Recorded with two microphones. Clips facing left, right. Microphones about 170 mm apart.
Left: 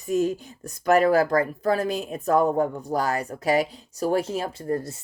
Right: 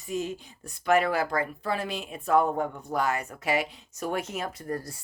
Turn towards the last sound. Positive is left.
turn(degrees=25)  # may be behind; listen again after turning